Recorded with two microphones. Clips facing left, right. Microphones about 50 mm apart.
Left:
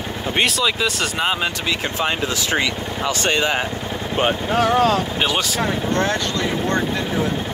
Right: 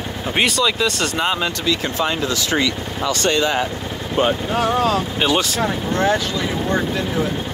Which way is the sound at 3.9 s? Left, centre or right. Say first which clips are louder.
Right 1 dB; left.